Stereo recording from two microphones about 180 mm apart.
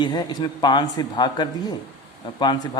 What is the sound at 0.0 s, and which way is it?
A man's voice, 25° left (ahead or behind).